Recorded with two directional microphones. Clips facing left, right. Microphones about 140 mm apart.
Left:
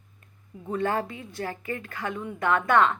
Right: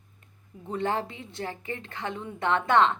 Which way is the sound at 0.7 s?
20° right (ahead or behind).